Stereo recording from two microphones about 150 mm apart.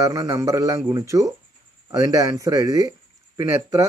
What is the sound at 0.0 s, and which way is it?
Speech, 25° right (ahead or behind).